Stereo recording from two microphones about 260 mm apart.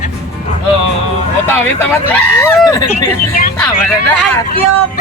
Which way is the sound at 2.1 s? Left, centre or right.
Centre.